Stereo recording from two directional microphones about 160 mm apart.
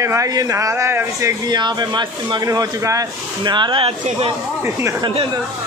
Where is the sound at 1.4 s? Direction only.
25° right (ahead or behind).